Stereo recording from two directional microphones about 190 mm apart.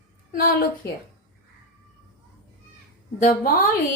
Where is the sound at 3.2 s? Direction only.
50° left (ahead or behind).